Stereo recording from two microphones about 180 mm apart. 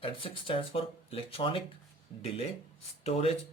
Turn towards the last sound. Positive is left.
turn(degrees=35)  # may be behind; listen again after turning